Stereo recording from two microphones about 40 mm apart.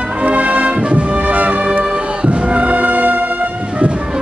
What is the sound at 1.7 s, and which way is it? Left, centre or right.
Music, right.